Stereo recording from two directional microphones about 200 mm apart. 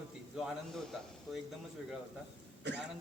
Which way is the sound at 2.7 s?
60° right (ahead or behind).